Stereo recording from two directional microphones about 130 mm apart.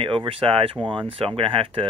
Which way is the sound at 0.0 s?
40° right (ahead or behind).